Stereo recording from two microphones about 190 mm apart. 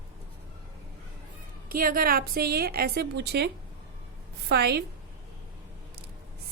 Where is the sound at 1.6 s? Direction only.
50° right (ahead or behind).